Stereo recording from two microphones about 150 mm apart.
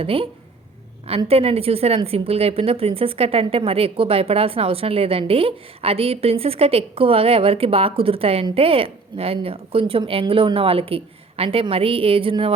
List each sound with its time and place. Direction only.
0.0 s speech: 40° right (ahead or behind)
1.3 s speech: 40° right (ahead or behind)